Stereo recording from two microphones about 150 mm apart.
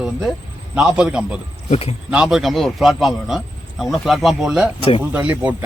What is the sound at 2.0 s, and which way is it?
A man's voice, 5° right (ahead or behind).